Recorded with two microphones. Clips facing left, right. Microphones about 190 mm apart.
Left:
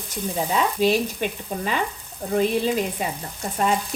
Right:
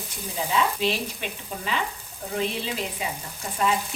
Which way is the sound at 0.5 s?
45° left (ahead or behind).